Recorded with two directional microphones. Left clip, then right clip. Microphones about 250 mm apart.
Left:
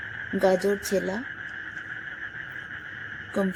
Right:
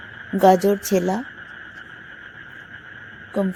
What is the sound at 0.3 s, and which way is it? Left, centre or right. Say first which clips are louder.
Speech: right 8 dB; right.